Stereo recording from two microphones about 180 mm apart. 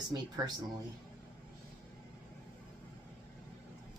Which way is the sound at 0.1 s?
20° right (ahead or behind).